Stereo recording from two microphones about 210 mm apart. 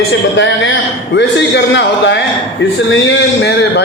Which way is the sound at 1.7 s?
55° left (ahead or behind).